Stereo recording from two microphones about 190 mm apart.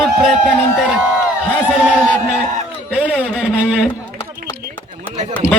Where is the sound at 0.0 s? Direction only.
Centre (ahead or behind).